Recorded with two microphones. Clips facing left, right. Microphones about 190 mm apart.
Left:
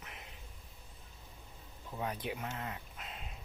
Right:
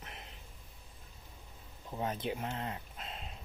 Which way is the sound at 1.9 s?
25° right (ahead or behind).